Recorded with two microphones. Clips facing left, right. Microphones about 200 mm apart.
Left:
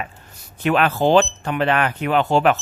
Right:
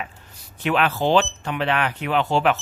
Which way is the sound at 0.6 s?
45° left (ahead or behind).